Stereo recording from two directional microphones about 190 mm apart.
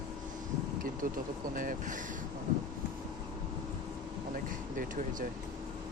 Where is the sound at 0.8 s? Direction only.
45° right (ahead or behind).